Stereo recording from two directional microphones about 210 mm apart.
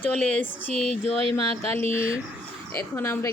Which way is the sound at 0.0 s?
5° left (ahead or behind).